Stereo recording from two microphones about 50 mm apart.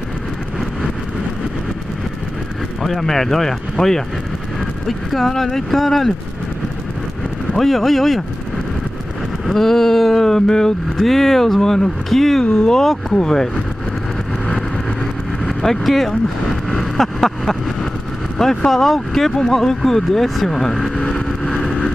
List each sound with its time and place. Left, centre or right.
2.8 s speech: centre
7.5 s speech: centre
9.5 s speech: centre
15.4 s speech: centre
16.9 s a sound: centre
18.4 s speech: centre
21.1 s vehicle: centre